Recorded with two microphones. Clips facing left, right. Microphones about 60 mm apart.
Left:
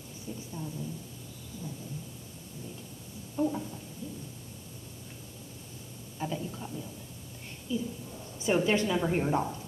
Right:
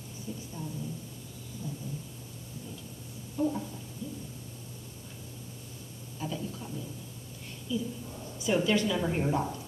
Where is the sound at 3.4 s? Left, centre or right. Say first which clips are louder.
Even; left.